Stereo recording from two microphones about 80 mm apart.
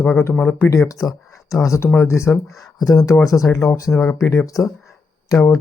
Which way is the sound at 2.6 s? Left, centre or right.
Left.